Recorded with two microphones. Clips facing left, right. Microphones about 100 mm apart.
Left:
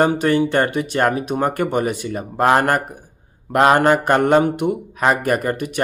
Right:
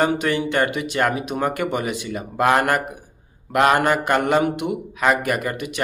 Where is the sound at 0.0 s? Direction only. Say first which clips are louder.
Left 4 dB; 25° left (ahead or behind).